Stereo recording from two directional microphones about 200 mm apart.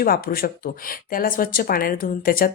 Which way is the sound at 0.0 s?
45° left (ahead or behind).